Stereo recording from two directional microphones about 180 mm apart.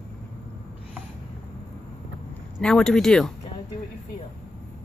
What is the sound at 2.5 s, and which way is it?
Speech, 5° left (ahead or behind).